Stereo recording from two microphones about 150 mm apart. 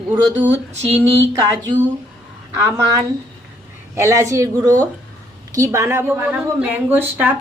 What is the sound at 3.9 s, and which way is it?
A woman's voice, 20° right (ahead or behind).